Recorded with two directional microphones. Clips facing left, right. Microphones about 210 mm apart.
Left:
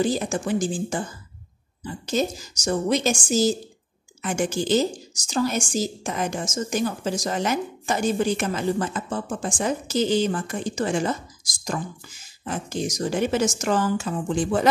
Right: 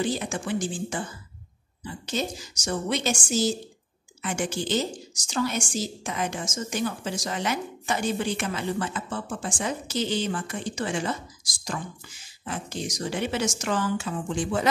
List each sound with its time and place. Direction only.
0.0 s a woman's voice: 40° left (ahead or behind)
12.4 s speech: 45° left (ahead or behind)